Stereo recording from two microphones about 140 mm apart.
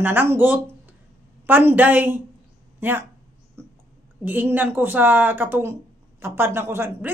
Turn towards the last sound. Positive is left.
turn(degrees=-15)  # may be behind; listen again after turning